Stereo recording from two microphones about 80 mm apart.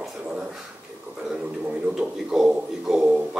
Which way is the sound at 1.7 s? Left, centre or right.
Centre.